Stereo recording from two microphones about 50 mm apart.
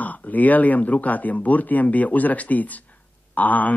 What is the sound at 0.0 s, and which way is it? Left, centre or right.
Speech, left.